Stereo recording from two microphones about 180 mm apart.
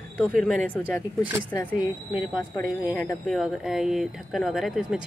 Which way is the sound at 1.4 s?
20° left (ahead or behind).